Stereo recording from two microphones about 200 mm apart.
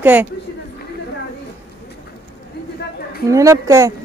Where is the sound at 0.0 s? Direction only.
10° right (ahead or behind).